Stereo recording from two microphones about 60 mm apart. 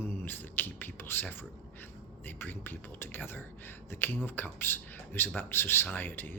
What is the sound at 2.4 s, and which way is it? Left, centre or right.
Speech, left.